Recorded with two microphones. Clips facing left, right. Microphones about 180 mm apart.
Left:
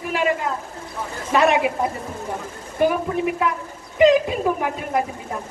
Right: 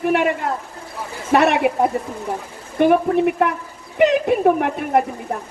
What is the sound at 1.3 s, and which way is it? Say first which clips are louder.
A woman's voice: right 2 dB; 60° right (ahead or behind).